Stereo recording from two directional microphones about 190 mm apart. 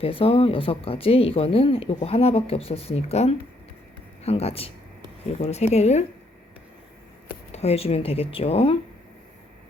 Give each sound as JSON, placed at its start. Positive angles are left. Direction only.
{"t": 0.0, "sound": "speech", "side_deg": 30}
{"t": 7.5, "sound": "speech", "side_deg": 35}